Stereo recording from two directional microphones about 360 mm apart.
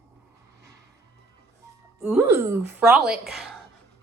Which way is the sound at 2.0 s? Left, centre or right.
Centre.